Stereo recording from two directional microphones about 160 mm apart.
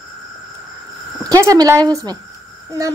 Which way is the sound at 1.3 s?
20° right (ahead or behind).